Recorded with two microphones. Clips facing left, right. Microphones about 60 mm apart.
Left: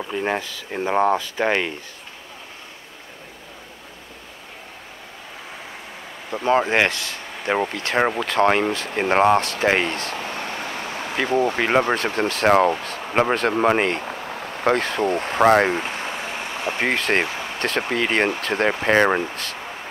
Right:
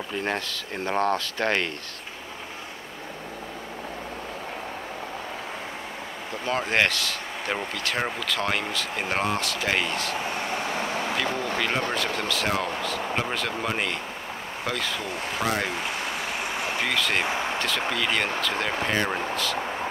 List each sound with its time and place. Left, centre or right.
0.1 s speech: centre
6.3 s speech: left
10.7 s vehicle: right
11.0 s speech: left